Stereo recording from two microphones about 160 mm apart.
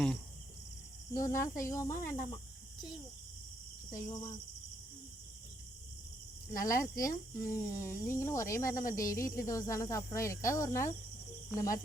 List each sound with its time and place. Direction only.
1.1 s speech: 20° left (ahead or behind)
3.9 s speech: 20° left (ahead or behind)
6.6 s speech: 20° left (ahead or behind)